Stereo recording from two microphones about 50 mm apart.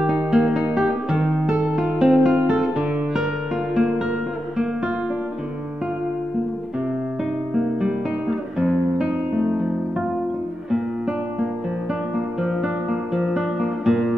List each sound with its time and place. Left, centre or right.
0.0 s music: centre
7.5 s music: centre
12.4 s music: centre